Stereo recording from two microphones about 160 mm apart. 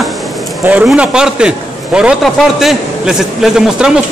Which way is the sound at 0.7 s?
5° right (ahead or behind).